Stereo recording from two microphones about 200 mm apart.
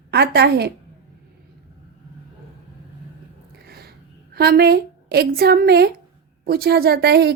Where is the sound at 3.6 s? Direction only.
50° right (ahead or behind).